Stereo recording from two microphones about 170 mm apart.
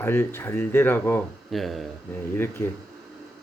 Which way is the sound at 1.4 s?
Centre (ahead or behind).